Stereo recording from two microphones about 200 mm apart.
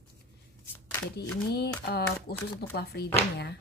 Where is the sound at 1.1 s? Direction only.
55° left (ahead or behind).